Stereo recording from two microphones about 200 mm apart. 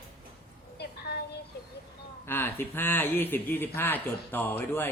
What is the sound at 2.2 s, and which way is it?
Speech, 10° left (ahead or behind).